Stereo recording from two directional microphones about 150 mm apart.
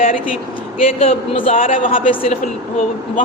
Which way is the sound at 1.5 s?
65° left (ahead or behind).